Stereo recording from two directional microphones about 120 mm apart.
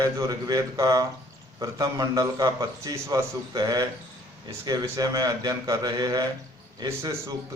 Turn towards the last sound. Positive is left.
turn(degrees=-25)  # may be behind; listen again after turning